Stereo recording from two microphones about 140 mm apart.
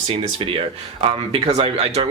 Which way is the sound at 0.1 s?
45° right (ahead or behind).